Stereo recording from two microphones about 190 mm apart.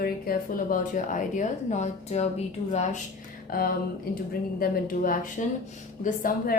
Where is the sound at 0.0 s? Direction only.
50° left (ahead or behind).